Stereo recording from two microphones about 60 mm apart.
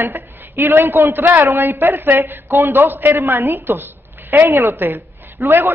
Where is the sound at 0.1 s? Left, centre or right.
Right.